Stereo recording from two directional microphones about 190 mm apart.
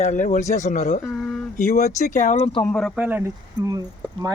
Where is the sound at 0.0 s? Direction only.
40° left (ahead or behind).